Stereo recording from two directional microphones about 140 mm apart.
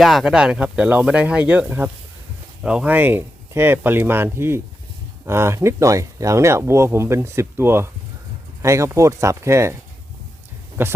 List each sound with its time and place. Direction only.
0.0 s speech: centre (ahead or behind); by 9.7 s 20° right (ahead or behind)
10.8 s speech: 15° right (ahead or behind)